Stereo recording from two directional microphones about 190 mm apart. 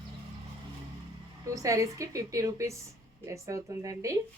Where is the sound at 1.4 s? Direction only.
15° right (ahead or behind).